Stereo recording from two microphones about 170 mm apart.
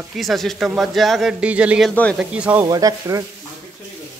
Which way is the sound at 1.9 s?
10° left (ahead or behind).